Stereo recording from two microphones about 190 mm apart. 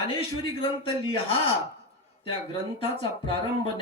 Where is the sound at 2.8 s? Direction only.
30° left (ahead or behind).